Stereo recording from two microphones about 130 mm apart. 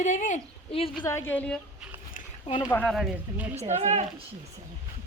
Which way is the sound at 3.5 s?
55° right (ahead or behind).